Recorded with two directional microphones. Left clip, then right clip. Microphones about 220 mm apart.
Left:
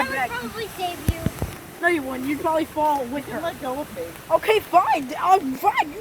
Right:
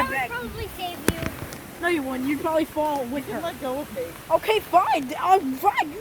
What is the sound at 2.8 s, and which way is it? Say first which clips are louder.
Speech: left 4 dB; 20° left (ahead or behind).